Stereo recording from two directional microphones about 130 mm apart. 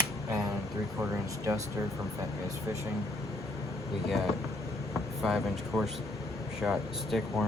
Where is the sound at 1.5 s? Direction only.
25° right (ahead or behind).